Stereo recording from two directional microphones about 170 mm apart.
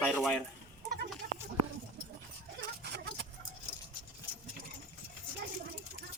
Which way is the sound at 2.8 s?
80° right.